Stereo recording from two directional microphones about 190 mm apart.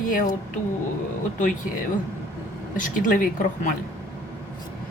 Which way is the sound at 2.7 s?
45° left (ahead or behind).